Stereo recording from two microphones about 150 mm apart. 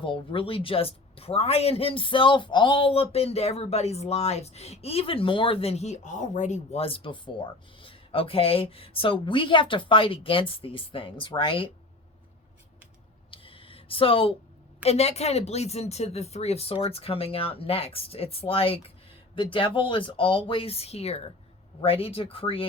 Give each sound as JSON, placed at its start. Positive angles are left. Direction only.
{"t": 0.0, "sound": "speech", "side_deg": 35}
{"t": 13.3, "sound": "a sound", "side_deg": 35}
{"t": 14.8, "sound": "speech", "side_deg": 45}